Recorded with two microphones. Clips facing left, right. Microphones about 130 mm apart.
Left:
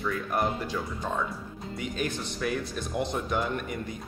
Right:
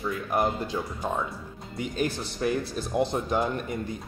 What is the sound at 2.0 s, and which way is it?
Speech, 25° right (ahead or behind).